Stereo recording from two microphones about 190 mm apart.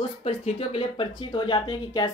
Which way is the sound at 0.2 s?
30° left (ahead or behind).